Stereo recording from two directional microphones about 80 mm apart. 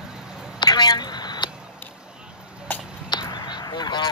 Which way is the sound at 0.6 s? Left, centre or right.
Left.